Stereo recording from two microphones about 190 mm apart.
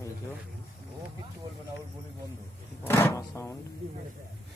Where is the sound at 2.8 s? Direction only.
10° left (ahead or behind).